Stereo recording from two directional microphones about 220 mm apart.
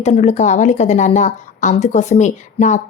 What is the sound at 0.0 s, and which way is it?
A woman's voice, 30° left (ahead or behind).